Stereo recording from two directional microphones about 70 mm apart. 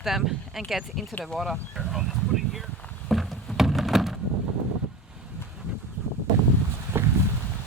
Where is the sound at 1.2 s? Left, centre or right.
Centre.